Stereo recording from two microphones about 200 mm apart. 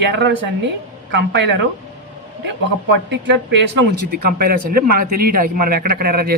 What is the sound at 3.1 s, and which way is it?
A man's voice, 60° right (ahead or behind).